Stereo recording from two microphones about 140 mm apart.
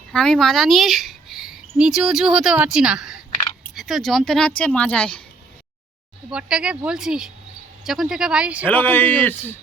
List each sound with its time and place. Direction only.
0.1 s speech: 5° left (ahead or behind)
6.3 s speech: 5° right (ahead or behind)
8.6 s speech: 15° left (ahead or behind)